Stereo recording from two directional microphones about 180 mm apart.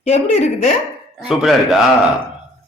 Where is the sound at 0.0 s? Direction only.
40° left (ahead or behind).